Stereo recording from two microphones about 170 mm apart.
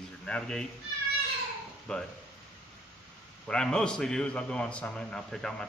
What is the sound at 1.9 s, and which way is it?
Speech, 5° left (ahead or behind).